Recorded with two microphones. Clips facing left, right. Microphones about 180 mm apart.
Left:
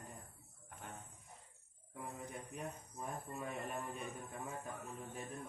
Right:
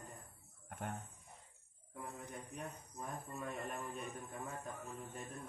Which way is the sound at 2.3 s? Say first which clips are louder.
Left 1 dB; centre (ahead or behind).